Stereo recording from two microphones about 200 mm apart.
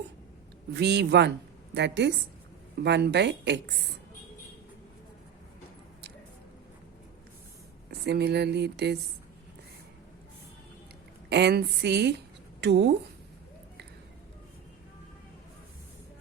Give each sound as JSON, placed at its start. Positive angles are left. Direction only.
{"t": 0.7, "sound": "speech", "side_deg": -55}
{"t": 8.0, "sound": "speech", "side_deg": -55}
{"t": 11.3, "sound": "a woman's voice", "side_deg": -55}